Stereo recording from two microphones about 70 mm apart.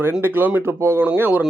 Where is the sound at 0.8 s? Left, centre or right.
Right.